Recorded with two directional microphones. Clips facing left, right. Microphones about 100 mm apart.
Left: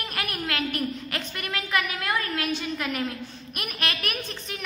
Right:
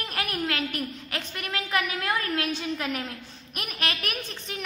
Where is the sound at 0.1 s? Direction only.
30° right (ahead or behind).